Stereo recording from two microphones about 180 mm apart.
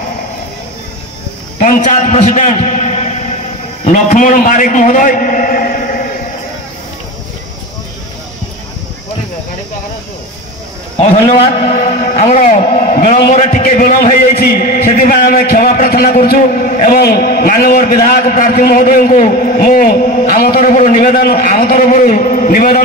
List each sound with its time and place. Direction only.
1.6 s a man's voice: 45° left (ahead or behind)
11.0 s a man's voice: 35° left (ahead or behind)